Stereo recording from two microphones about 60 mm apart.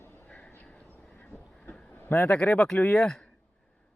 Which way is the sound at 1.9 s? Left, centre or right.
Left.